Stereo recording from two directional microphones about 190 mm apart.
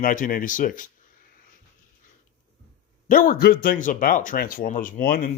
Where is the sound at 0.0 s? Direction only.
45° left (ahead or behind).